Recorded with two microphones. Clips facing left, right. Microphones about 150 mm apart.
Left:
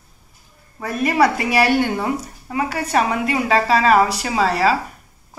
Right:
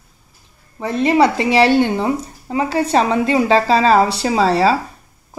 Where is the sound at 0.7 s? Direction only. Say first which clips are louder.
Right 4 dB; 25° right (ahead or behind).